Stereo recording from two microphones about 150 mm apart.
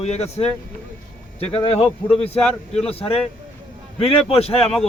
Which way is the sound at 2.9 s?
40° left (ahead or behind).